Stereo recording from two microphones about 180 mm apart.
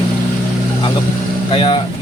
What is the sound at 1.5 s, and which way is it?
Speech, 30° left (ahead or behind).